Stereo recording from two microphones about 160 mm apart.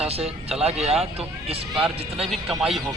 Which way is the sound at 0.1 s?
40° right (ahead or behind).